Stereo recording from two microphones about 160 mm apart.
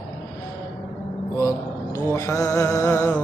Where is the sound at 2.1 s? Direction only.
20° left (ahead or behind).